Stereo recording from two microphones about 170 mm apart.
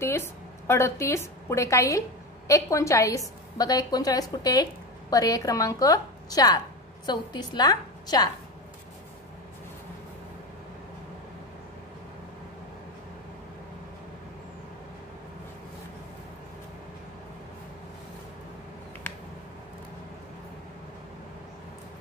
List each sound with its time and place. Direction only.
0.0 s a woman's voice: 15° left (ahead or behind)